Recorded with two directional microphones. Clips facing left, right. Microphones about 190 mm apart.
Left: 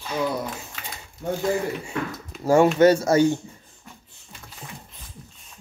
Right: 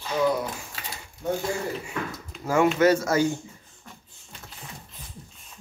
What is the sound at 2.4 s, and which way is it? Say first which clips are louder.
Speech: left 4 dB; 30° left (ahead or behind).